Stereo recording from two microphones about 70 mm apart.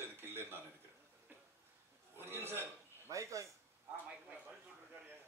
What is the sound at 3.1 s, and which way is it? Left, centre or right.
Speech, right.